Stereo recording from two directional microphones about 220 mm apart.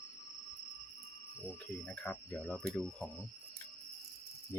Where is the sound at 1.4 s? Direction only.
5° left (ahead or behind).